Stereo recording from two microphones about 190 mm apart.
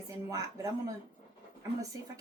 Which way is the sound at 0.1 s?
20° right (ahead or behind).